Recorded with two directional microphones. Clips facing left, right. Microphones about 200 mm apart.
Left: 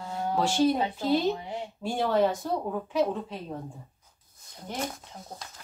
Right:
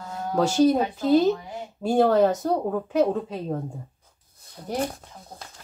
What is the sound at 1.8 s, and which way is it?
Speech, 45° right (ahead or behind).